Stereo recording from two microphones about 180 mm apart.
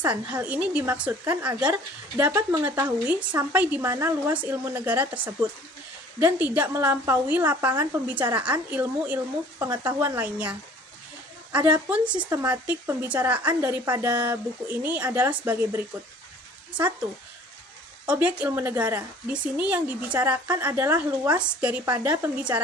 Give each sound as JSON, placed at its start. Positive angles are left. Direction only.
{"t": 0.0, "sound": "speech", "side_deg": -10}
{"t": 11.5, "sound": "speech", "side_deg": -5}
{"t": 12.0, "sound": "speech", "side_deg": -25}
{"t": 12.3, "sound": "speech", "side_deg": -10}
{"t": 18.0, "sound": "speech", "side_deg": -5}